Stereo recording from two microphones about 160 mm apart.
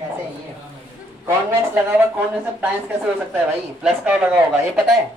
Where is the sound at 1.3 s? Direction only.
15° right (ahead or behind).